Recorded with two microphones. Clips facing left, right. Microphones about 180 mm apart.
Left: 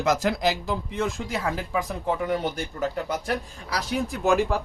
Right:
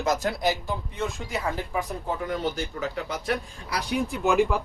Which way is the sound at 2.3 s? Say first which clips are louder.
Left 2 dB; 55° left (ahead or behind).